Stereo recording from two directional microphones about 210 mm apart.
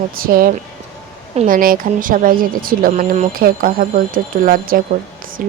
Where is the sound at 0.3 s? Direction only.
40° right (ahead or behind).